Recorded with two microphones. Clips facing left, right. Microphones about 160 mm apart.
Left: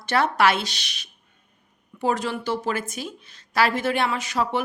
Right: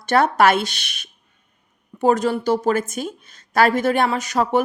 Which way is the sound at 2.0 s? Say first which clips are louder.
Right 7 dB; 45° right (ahead or behind).